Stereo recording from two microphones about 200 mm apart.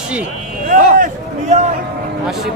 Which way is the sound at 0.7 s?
40° right (ahead or behind).